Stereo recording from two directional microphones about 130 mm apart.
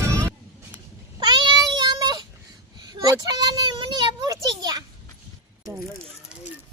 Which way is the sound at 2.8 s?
30° right (ahead or behind).